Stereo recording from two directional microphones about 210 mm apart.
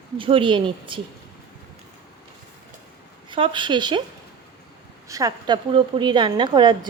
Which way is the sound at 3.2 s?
25° right (ahead or behind).